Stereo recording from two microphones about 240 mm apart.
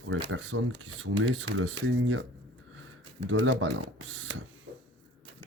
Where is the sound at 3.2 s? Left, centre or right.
Right.